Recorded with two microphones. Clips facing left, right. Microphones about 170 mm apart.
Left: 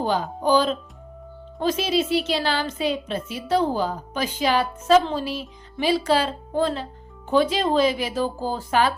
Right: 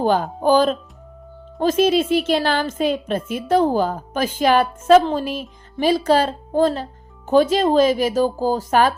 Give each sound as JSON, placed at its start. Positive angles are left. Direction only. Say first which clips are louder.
{"t": 0.0, "sound": "a woman's voice", "louder": "right 5 dB", "side_deg": -50}